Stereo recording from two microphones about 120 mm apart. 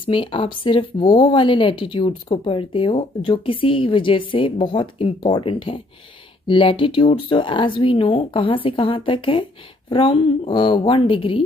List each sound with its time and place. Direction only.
0.0 s a woman's voice: 45° left (ahead or behind)